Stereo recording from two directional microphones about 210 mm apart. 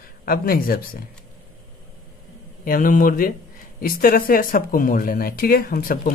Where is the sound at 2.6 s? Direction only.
40° left (ahead or behind).